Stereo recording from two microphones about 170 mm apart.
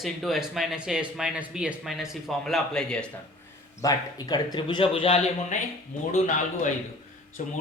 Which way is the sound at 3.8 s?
20° left (ahead or behind).